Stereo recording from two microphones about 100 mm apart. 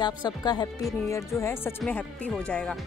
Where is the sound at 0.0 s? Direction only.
45° left (ahead or behind).